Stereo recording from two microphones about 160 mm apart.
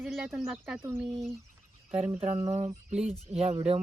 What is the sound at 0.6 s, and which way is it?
Speech, 10° right (ahead or behind).